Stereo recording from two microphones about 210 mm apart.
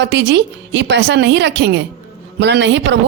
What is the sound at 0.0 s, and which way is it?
A woman's voice, 55° right (ahead or behind).